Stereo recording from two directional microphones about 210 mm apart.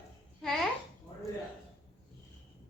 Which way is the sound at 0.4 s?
Centre (ahead or behind).